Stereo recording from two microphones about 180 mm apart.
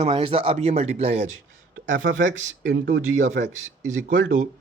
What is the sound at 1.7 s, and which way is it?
Speech, 90° right.